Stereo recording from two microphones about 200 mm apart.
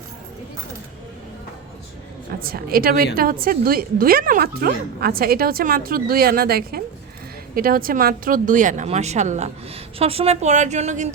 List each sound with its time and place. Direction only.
2.4 s a woman's voice: 45° right (ahead or behind)